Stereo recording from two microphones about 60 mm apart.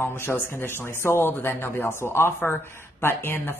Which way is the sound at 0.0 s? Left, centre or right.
Left.